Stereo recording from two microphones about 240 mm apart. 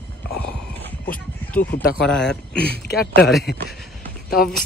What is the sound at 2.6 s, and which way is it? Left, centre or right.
Speech, left.